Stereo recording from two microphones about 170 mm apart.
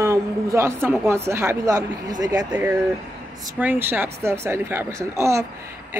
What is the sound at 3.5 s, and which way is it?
Speech, 10° right (ahead or behind).